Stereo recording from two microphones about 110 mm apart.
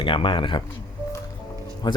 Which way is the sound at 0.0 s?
50° left (ahead or behind).